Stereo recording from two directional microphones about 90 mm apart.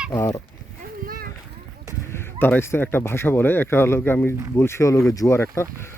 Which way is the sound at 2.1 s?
25° left (ahead or behind).